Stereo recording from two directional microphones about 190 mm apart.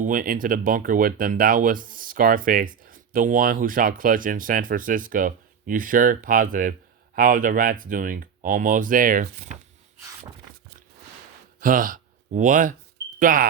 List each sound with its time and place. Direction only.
0.0 s speech: 45° right (ahead or behind)
11.6 s speech: 45° right (ahead or behind)